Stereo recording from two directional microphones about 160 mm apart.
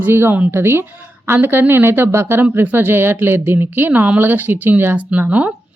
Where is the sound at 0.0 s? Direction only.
15° right (ahead or behind).